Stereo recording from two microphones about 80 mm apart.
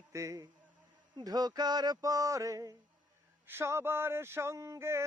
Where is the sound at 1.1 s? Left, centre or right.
Right.